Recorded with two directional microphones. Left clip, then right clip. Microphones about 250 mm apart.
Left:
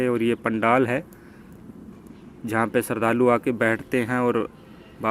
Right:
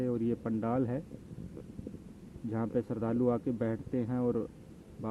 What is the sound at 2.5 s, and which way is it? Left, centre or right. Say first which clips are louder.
Speech: left 12 dB; centre.